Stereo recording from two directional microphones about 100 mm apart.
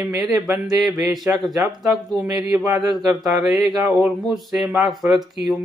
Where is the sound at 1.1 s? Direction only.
Centre (ahead or behind).